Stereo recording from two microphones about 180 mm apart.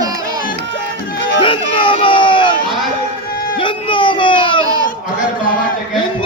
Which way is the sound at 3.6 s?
25° left (ahead or behind).